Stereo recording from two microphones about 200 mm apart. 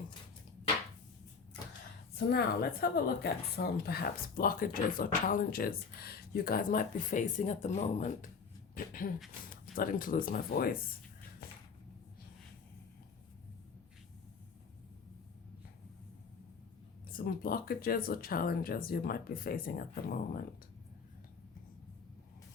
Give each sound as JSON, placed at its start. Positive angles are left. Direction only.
{"t": 2.1, "sound": "speech", "side_deg": 55}
{"t": 8.7, "sound": "a sound", "side_deg": 45}
{"t": 9.7, "sound": "speech", "side_deg": 45}
{"t": 17.1, "sound": "speech", "side_deg": 45}